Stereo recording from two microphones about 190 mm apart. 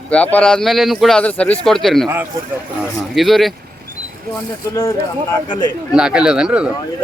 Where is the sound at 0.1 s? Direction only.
5° left (ahead or behind).